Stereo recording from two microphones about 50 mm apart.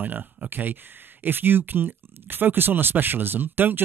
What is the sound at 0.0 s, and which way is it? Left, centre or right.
Speech, right.